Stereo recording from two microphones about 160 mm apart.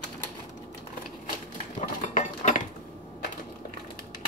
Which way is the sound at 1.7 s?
50° left (ahead or behind).